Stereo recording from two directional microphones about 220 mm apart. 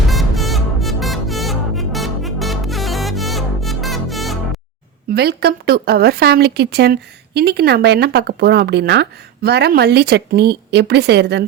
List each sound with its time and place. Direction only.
0.1 s music: centre (ahead or behind)
5.1 s speech: 45° right (ahead or behind)